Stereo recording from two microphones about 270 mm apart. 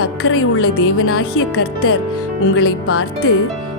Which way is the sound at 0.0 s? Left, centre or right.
Left.